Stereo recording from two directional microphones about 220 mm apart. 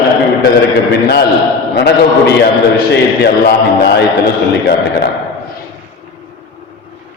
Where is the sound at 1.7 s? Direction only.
50° left (ahead or behind).